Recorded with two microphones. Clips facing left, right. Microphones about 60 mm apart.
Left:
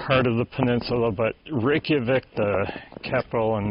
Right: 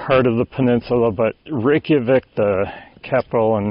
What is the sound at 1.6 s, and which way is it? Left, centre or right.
Speech, centre.